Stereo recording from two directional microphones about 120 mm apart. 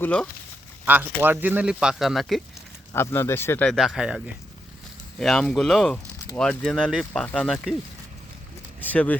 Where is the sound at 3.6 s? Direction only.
Centre (ahead or behind).